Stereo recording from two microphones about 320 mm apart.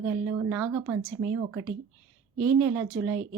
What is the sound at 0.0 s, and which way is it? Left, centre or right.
A woman's voice, centre.